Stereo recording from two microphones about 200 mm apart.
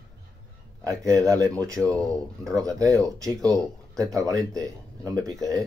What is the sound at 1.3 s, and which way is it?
Speech, 15° right (ahead or behind).